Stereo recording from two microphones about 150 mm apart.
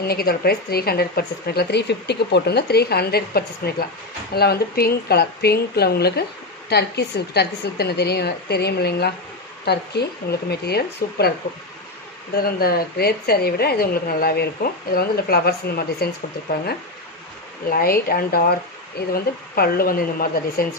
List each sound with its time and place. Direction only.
0.1 s a woman's voice: 90° left
12.4 s a woman's voice: 90° left
17.6 s speech: 75° left (ahead or behind)